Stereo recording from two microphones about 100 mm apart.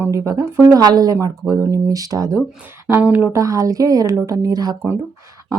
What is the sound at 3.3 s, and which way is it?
Speech, 35° right (ahead or behind).